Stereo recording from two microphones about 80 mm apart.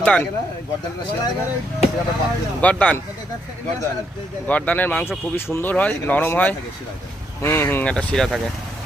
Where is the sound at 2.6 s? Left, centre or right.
Centre.